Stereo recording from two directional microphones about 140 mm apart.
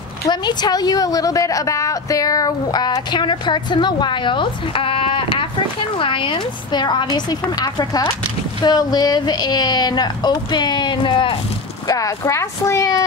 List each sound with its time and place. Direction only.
0.2 s speech: 30° left (ahead or behind)
11.9 s speech: 25° left (ahead or behind)